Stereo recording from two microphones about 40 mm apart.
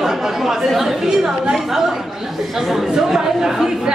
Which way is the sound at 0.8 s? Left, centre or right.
Centre.